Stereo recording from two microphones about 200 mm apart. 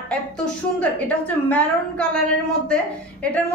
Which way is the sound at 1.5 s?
5° left (ahead or behind).